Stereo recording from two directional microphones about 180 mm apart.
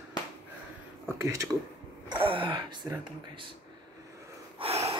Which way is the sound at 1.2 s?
20° right (ahead or behind).